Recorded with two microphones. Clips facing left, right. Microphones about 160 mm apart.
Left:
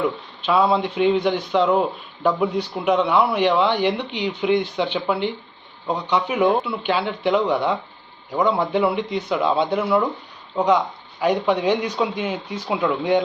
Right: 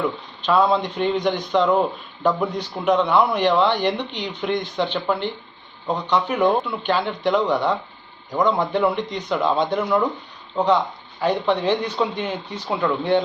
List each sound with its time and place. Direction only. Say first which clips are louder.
0.0 s speech: left 1 dB; 5° left (ahead or behind)